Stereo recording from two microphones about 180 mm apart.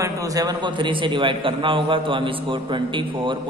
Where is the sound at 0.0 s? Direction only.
20° right (ahead or behind).